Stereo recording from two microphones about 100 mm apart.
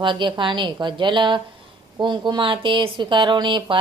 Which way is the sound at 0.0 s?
55° right (ahead or behind).